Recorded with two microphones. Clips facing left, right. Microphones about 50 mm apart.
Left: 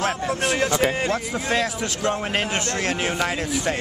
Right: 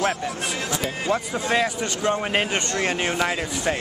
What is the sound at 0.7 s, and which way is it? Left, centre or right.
Speech, left.